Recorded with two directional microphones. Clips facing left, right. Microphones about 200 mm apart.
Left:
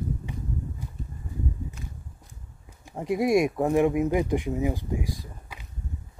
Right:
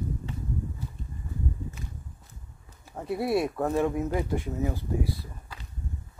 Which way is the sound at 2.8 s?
15° left (ahead or behind).